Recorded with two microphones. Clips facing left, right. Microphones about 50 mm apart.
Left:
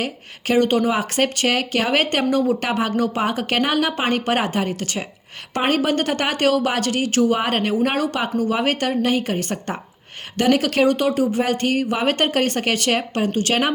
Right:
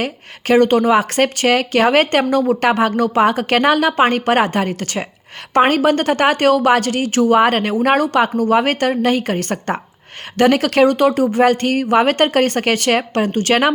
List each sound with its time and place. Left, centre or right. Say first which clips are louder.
0.0 s speech: right 3 dB; right